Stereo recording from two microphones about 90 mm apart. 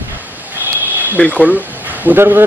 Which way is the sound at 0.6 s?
20° right (ahead or behind).